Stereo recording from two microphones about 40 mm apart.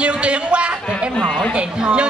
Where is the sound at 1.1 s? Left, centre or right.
Centre.